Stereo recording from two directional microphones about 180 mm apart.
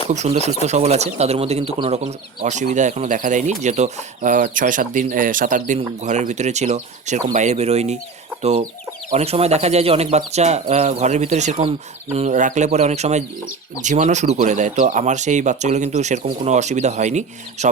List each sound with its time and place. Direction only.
0.1 s speech: 40° right (ahead or behind)